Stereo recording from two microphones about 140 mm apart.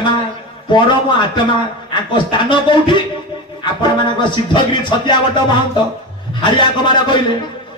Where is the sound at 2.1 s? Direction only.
35° left (ahead or behind).